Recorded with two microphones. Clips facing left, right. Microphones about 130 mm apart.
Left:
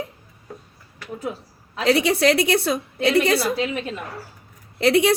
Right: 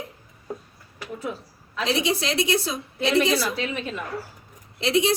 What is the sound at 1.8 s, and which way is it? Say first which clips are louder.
A woman's voice: left 6 dB; 60° left (ahead or behind).